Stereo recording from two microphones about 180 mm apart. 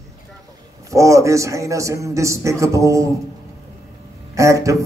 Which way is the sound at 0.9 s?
15° right (ahead or behind).